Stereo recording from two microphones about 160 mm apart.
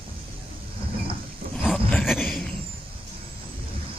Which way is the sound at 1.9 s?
Centre (ahead or behind).